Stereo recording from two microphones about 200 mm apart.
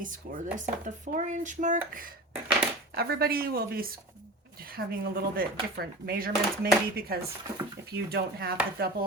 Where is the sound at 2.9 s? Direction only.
50° right (ahead or behind).